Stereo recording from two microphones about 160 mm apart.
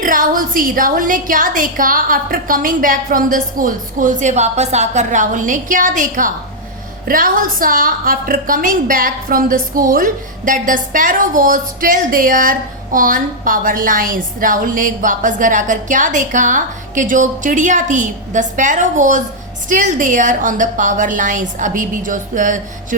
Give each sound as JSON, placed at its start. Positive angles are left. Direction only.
{"t": 0.0, "sound": "a woman's voice", "side_deg": -60}